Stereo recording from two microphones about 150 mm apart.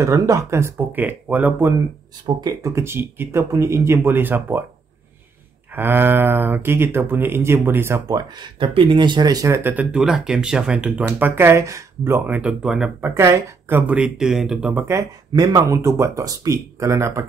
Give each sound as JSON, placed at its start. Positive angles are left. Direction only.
{"t": 0.0, "sound": "speech", "side_deg": -20}
{"t": 2.2, "sound": "speech", "side_deg": -25}
{"t": 5.8, "sound": "speech", "side_deg": -15}
{"t": 8.4, "sound": "speech", "side_deg": -35}
{"t": 13.1, "sound": "speech", "side_deg": -15}